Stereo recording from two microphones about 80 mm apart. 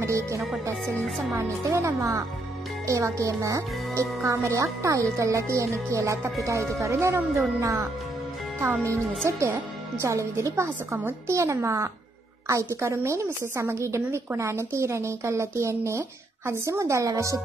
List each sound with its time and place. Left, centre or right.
0.0 s music: right
1.6 s a woman's voice: right
8.5 s speech: right
10.0 s a woman's voice: right